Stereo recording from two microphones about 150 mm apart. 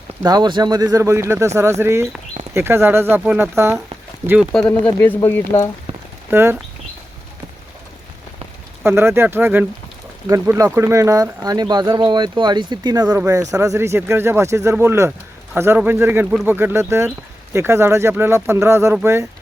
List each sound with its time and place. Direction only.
0.2 s speech: 25° right (ahead or behind)
4.5 s speech: 5° left (ahead or behind)
6.3 s speech: 15° right (ahead or behind)
8.8 s speech: 15° right (ahead or behind)